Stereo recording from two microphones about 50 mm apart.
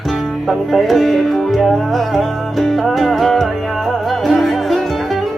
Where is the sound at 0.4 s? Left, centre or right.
Centre.